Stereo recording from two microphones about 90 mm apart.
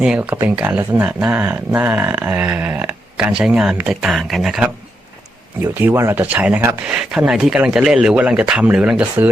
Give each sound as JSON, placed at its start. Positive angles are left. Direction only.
{"t": 0.0, "sound": "speech", "side_deg": -15}
{"t": 5.7, "sound": "speech", "side_deg": -25}